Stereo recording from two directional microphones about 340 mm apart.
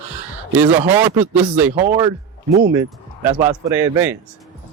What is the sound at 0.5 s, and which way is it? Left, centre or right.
Speech, centre.